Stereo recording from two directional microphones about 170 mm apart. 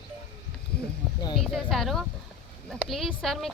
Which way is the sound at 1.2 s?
30° left (ahead or behind).